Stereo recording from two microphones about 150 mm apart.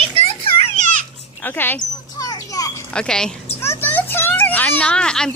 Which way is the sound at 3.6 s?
15° left (ahead or behind).